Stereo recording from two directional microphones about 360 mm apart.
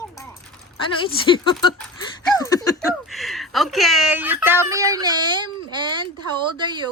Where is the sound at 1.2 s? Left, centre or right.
Centre.